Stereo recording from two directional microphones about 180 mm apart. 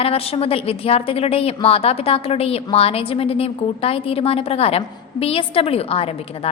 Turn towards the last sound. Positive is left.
turn(degrees=30)  # may be behind; listen again after turning